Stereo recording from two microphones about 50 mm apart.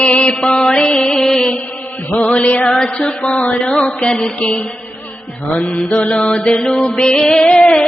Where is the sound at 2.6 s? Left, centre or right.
Centre.